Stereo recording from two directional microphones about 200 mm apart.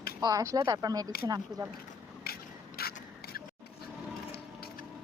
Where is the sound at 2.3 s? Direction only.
50° left (ahead or behind).